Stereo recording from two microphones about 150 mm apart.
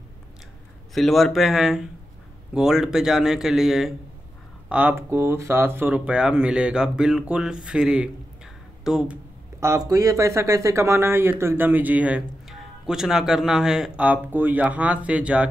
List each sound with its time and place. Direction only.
0.9 s speech: centre (ahead or behind)
9.6 s speech: 20° right (ahead or behind)